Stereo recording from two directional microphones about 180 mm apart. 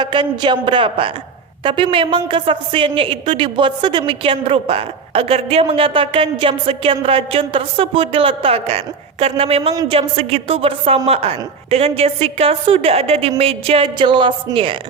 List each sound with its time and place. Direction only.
0.0 s a woman's voice: 25° right (ahead or behind)